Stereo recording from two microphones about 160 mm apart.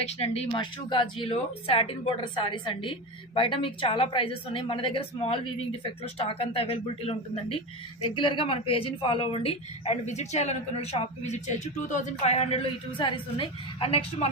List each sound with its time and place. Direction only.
0.0 s a woman's voice: 40° left (ahead or behind)